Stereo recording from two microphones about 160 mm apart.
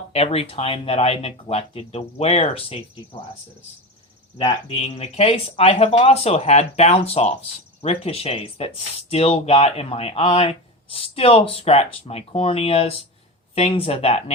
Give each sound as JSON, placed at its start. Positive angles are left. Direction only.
{"t": 0.1, "sound": "speech", "side_deg": 40}
{"t": 4.4, "sound": "speech", "side_deg": 35}